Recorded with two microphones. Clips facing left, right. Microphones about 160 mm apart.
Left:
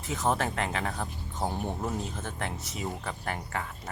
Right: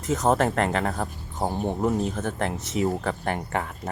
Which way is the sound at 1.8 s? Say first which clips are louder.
Right 9 dB; 65° right (ahead or behind).